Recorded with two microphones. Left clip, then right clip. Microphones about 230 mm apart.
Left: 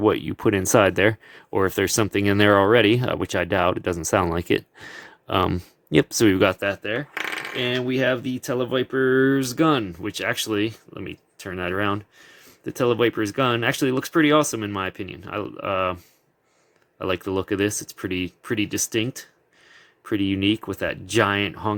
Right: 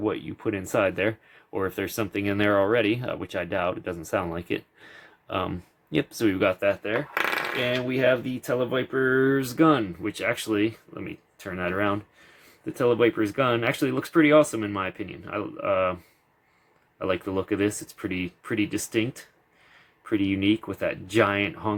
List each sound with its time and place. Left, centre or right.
0.0 s speech: left
17.0 s speech: left